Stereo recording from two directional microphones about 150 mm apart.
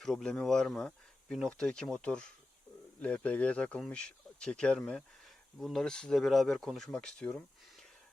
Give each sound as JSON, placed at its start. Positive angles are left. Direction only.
{"t": 0.0, "sound": "a man's voice", "side_deg": 5}